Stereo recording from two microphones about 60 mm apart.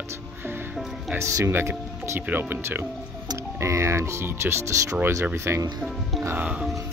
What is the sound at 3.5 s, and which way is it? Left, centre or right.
Speech, right.